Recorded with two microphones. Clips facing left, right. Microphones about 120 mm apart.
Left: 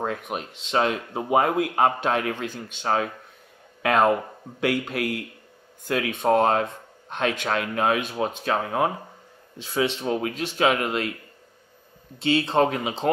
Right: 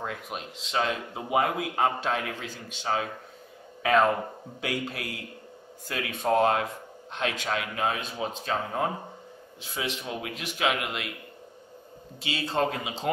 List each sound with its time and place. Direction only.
0.0 s speech: 50° left (ahead or behind)
10.0 s speech: 45° left (ahead or behind)
12.3 s speech: 55° left (ahead or behind)